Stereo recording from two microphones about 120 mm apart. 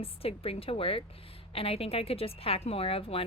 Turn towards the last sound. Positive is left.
turn(degrees=50)  # may be behind; listen again after turning